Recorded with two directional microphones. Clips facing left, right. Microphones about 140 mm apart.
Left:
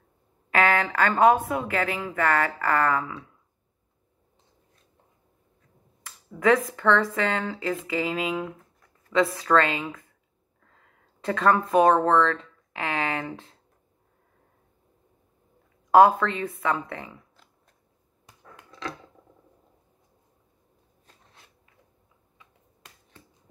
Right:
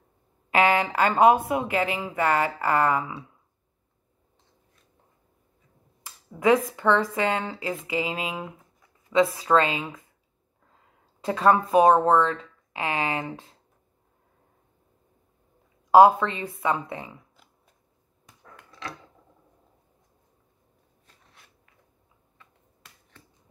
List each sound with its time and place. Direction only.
0.5 s speech: 20° right (ahead or behind)
6.0 s speech: 15° right (ahead or behind)
8.5 s a sound: 5° right (ahead or behind)
9.1 s speech: 20° right (ahead or behind)
11.3 s speech: 20° right (ahead or behind)
12.3 s a sound: 20° right (ahead or behind)
15.9 s speech: 20° right (ahead or behind)